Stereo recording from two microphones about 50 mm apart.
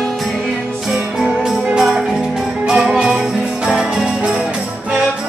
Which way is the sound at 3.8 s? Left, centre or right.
Centre.